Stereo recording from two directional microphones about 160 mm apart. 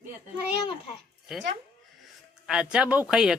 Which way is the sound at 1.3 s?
5° right (ahead or behind).